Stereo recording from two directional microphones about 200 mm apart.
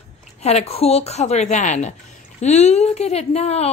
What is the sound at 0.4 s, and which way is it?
Speech, 30° left (ahead or behind).